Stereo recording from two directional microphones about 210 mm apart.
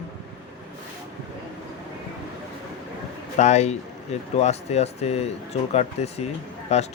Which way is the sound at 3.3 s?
35° left (ahead or behind).